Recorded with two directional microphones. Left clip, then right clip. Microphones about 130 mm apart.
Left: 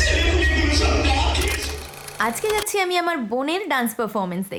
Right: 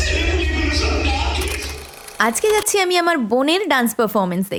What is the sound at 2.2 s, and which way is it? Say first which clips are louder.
A woman's voice: right 5 dB; 35° right (ahead or behind).